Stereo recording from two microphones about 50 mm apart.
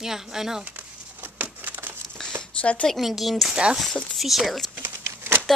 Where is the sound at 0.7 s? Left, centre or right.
Right.